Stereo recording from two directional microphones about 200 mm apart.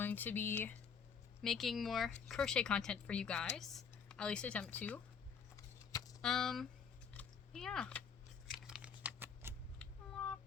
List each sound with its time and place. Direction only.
0.0 s speech: 10° left (ahead or behind)
5.5 s keys jangling: 15° left (ahead or behind)
6.2 s speech: centre (ahead or behind)
7.2 s a sound: 5° left (ahead or behind)
8.6 s computer keyboard: 5° right (ahead or behind)
9.7 s a sound: 5° left (ahead or behind)